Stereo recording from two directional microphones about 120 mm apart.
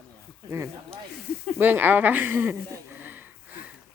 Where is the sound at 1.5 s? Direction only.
15° right (ahead or behind).